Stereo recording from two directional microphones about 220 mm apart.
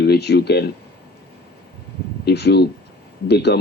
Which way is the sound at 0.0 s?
50° left (ahead or behind).